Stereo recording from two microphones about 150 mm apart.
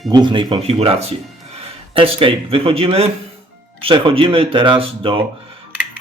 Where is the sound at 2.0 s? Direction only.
40° right (ahead or behind).